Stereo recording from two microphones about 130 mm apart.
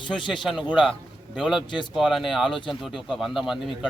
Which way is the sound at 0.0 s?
35° left (ahead or behind).